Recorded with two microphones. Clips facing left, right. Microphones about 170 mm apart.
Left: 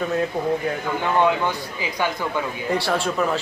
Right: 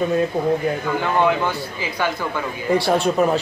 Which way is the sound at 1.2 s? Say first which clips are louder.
Right 1 dB; 15° left (ahead or behind).